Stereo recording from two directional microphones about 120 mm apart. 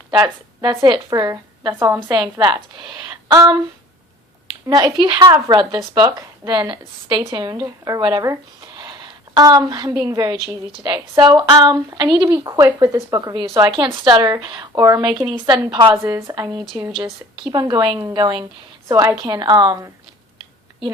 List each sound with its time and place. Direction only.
0.1 s a woman's voice: 40° right (ahead or behind)
4.6 s speech: 30° right (ahead or behind)
13.7 s a woman's voice: 45° right (ahead or behind)
15.3 s a woman's voice: 45° right (ahead or behind)
18.9 s a woman's voice: 25° right (ahead or behind)